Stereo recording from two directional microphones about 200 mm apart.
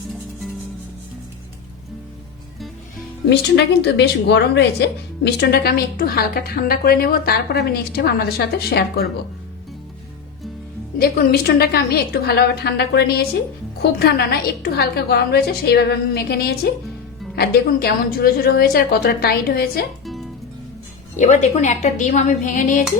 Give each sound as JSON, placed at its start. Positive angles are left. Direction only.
{"t": 3.2, "sound": "a woman's voice", "side_deg": 60}
{"t": 10.9, "sound": "a woman's voice", "side_deg": 50}
{"t": 21.2, "sound": "a woman's voice", "side_deg": 35}